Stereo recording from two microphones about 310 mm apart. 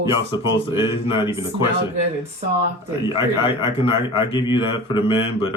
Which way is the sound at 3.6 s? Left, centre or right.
Centre.